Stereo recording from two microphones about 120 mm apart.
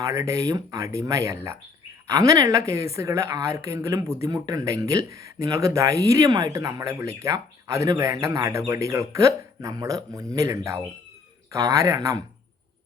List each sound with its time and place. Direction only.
0.0 s speech: 25° right (ahead or behind)